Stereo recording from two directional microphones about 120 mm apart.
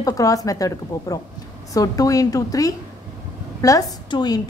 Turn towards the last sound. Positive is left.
turn(degrees=35)  # may be behind; listen again after turning